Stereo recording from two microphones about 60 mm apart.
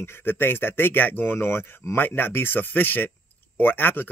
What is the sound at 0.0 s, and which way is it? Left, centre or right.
Speech, left.